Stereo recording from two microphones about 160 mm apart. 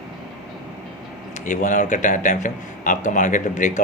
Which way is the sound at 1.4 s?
50° left (ahead or behind).